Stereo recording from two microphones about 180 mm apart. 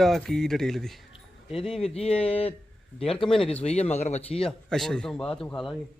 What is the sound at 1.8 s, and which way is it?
Speech, 35° left (ahead or behind).